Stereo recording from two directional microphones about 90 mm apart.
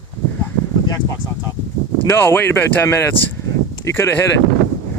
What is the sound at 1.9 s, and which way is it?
Speech, 25° left (ahead or behind).